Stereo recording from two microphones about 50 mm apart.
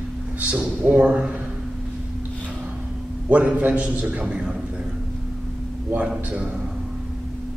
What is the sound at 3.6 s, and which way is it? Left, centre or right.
Speech, right.